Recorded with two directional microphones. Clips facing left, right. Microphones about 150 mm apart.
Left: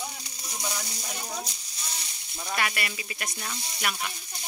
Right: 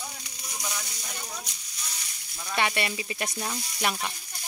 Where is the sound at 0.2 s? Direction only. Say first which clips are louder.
Left 2 dB; 30° left (ahead or behind).